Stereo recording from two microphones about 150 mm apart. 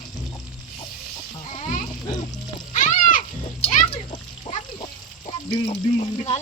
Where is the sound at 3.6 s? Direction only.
40° left (ahead or behind).